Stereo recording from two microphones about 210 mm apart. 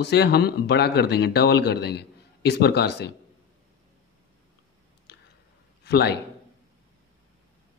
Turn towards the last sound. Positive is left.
turn(degrees=50)  # may be behind; listen again after turning